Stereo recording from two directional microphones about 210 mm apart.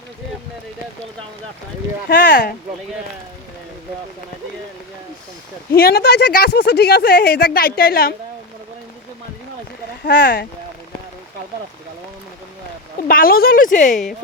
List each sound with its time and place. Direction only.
2.0 s speech: 50° left (ahead or behind)
5.7 s speech: 45° left (ahead or behind)
10.0 s speech: 50° left (ahead or behind)
13.0 s speech: 45° left (ahead or behind)